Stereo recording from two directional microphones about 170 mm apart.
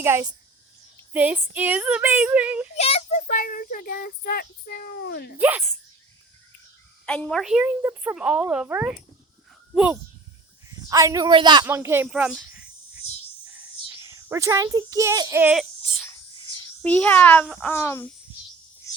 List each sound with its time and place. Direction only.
0.0 s a woman's voice: 15° right (ahead or behind)
2.7 s a child's voice: 35° left (ahead or behind); by 5.4 s 75° left (ahead or behind)
5.4 s a woman's voice: 10° right (ahead or behind)
7.0 s a woman's voice: 5° left (ahead or behind); by 11.6 s 25° right (ahead or behind)
11.6 s a woman's voice: 15° right (ahead or behind)
12.0 s a child's voice: 5° right (ahead or behind)
16.8 s a child's voice: 10° left (ahead or behind)
17.7 s a child's voice: 15° left (ahead or behind)